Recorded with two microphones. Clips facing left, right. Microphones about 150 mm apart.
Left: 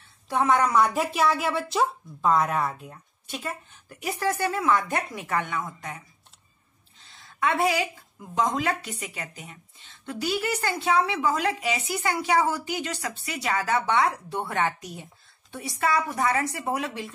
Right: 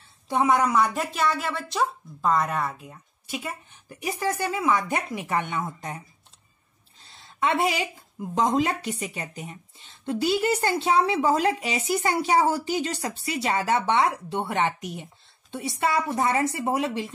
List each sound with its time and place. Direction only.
0.3 s speech: 15° right (ahead or behind)
0.6 s speech: centre (ahead or behind); by 6.0 s 30° right (ahead or behind)
7.2 s a woman's voice: 25° right (ahead or behind)